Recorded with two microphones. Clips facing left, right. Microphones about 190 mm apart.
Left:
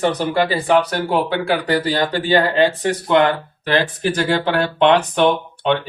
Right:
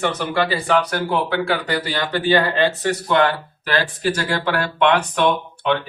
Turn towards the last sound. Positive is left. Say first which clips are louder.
# left 2 dB
turn(degrees=25)  # may be behind; listen again after turning